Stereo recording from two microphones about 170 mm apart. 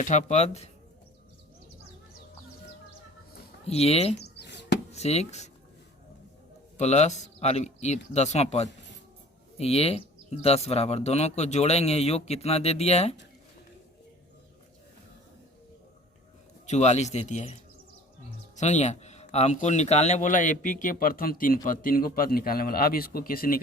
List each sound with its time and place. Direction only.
0.0 s speech: 45° left (ahead or behind)
3.7 s speech: 40° left (ahead or behind)
4.2 s a sound: 80° left
4.9 s speech: 40° left (ahead or behind)
6.7 s speech: 40° left (ahead or behind)
16.6 s speech: 40° left (ahead or behind); by 23.6 s 60° left (ahead or behind)